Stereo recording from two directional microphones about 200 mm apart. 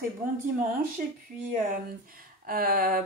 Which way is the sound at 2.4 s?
45° right (ahead or behind).